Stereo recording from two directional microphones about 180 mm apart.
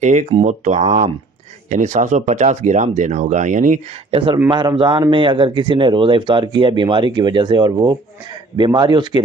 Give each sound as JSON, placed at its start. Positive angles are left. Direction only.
{"t": 0.0, "sound": "speech", "side_deg": -40}
{"t": 4.4, "sound": "a man's voice", "side_deg": -25}